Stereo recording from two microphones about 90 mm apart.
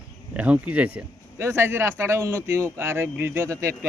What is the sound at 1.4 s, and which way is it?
Speech, 30° right (ahead or behind).